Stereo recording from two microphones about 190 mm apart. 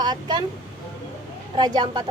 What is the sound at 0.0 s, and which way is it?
Speech, 25° right (ahead or behind).